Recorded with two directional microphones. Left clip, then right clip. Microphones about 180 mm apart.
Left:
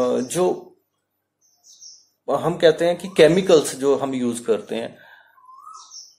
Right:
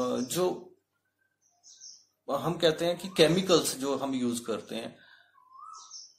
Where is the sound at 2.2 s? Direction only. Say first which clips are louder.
Left 10 dB; 15° left (ahead or behind).